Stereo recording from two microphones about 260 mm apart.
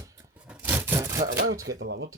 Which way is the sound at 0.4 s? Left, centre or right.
Centre.